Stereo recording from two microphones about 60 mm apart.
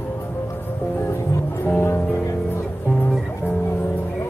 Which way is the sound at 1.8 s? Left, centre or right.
Left.